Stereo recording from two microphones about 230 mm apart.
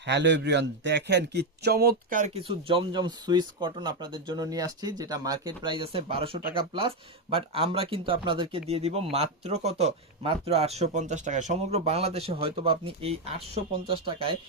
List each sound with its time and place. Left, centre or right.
0.0 s a man's voice: right